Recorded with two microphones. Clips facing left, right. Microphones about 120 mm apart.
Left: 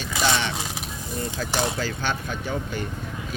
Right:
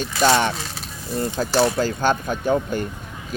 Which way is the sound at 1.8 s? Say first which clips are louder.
Right 7 dB; 45° right (ahead or behind).